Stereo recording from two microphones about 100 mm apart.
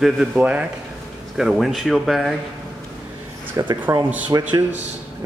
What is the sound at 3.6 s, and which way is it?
Speech, 35° right (ahead or behind).